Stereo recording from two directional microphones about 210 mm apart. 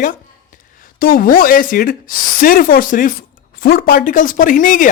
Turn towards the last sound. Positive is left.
turn(degrees=40)  # may be behind; listen again after turning